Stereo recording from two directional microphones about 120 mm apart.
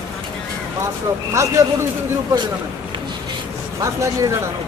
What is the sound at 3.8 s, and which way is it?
Speech, 25° right (ahead or behind).